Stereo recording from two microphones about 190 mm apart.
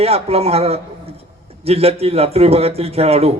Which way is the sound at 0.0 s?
30° right (ahead or behind).